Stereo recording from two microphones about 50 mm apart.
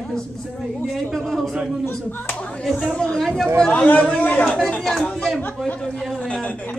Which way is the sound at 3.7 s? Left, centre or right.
Left.